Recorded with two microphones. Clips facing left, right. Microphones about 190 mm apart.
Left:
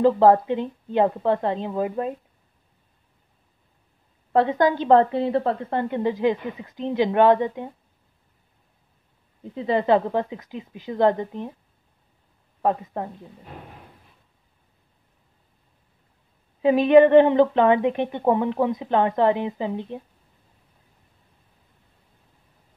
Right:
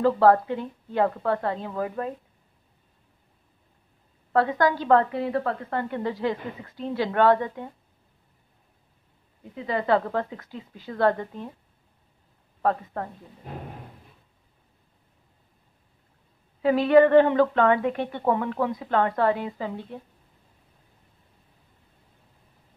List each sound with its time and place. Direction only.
0.0 s a woman's voice: 20° left (ahead or behind)
4.3 s a woman's voice: 20° left (ahead or behind)
9.4 s a woman's voice: 25° left (ahead or behind)
12.6 s speech: 15° left (ahead or behind)
16.6 s a woman's voice: 20° left (ahead or behind)